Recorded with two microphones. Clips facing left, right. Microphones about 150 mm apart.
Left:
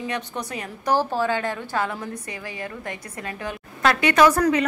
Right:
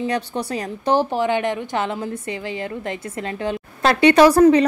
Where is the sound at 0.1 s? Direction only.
30° right (ahead or behind).